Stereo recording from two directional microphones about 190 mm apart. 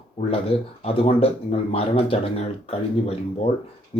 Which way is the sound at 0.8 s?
30° left (ahead or behind).